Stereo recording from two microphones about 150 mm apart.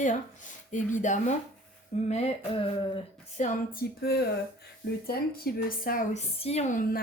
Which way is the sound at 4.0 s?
90° left.